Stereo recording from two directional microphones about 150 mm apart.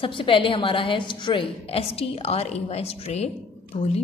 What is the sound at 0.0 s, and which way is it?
A woman's voice, 35° left (ahead or behind).